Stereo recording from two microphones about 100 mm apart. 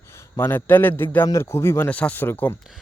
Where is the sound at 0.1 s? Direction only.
25° left (ahead or behind).